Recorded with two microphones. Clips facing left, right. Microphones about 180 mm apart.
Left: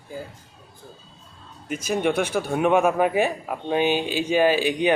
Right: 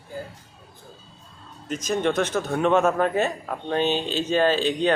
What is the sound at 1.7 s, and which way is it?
A man's voice, 10° left (ahead or behind).